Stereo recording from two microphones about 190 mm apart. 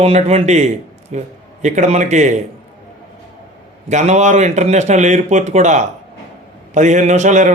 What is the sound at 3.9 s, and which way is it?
A man's voice, 35° right (ahead or behind).